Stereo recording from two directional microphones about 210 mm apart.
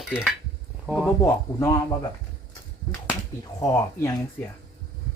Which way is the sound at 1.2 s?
15° left (ahead or behind).